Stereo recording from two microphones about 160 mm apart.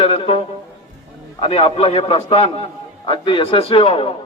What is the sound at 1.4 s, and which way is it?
Speech, 40° left (ahead or behind).